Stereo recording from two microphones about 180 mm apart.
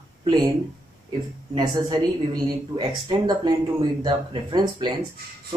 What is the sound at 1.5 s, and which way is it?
Speech, 25° right (ahead or behind).